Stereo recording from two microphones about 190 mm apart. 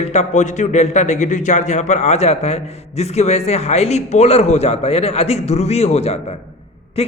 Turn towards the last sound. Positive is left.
turn(degrees=30)  # may be behind; listen again after turning